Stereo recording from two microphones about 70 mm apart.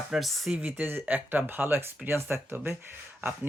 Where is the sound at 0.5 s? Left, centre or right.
Right.